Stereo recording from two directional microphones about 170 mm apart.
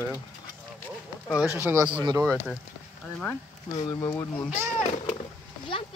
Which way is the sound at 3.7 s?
20° left (ahead or behind).